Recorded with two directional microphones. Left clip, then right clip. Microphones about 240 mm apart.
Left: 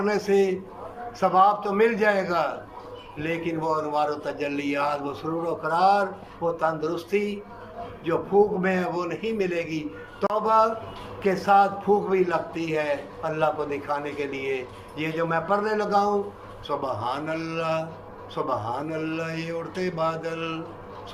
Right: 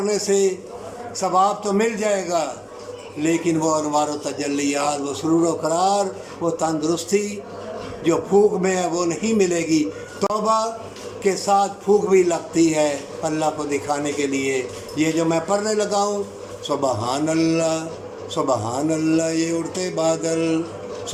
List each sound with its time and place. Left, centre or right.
0.0 s a man's voice: centre
8.6 s a man's voice: centre